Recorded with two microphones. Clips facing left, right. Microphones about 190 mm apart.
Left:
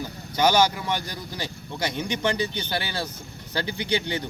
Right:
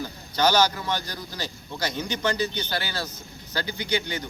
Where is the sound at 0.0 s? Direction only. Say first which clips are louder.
Left 1 dB; 15° left (ahead or behind).